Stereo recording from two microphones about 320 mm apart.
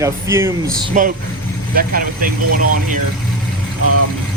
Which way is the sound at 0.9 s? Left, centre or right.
Right.